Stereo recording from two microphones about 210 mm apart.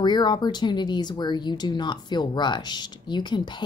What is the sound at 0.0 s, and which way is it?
Speech, 20° left (ahead or behind).